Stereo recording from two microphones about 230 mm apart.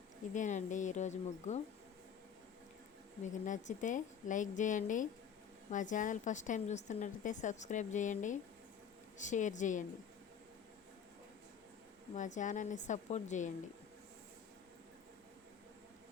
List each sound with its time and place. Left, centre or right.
0.3 s a woman's voice: left
3.2 s a woman's voice: left
12.1 s a woman's voice: left